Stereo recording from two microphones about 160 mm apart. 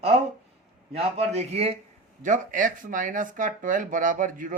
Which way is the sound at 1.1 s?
40° right (ahead or behind).